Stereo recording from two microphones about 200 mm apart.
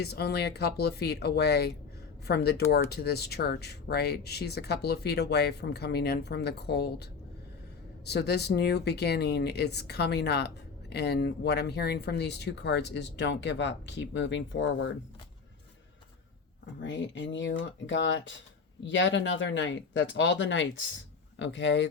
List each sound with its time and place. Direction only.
0.0 s speech: 50° left (ahead or behind); by 14.9 s 70° left (ahead or behind)
16.8 s speech: 65° left (ahead or behind)